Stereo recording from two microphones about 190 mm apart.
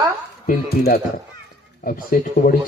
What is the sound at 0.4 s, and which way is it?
A man's voice, 50° left (ahead or behind).